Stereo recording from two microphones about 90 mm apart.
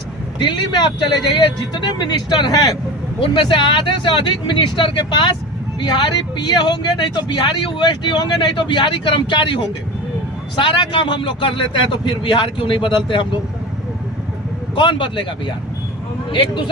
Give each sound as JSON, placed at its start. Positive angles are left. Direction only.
{"t": 0.3, "sound": "a man's voice", "side_deg": 60}
{"t": 3.2, "sound": "a man's voice", "side_deg": 65}
{"t": 14.8, "sound": "speech", "side_deg": 65}